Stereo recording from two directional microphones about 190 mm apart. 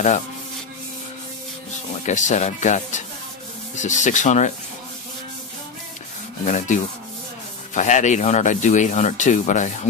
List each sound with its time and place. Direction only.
2.0 s speech: 40° left (ahead or behind)
6.4 s speech: 40° left (ahead or behind)